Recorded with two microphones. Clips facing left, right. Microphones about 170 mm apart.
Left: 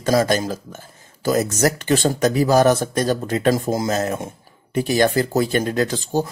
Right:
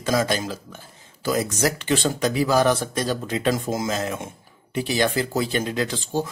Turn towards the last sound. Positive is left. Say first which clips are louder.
# left 4 dB
turn(degrees=45)  # may be behind; listen again after turning